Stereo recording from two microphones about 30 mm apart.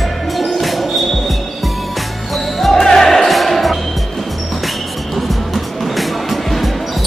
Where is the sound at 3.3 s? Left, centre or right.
Centre.